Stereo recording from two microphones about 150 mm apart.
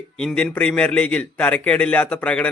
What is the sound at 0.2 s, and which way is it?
A man's voice, 5° left (ahead or behind).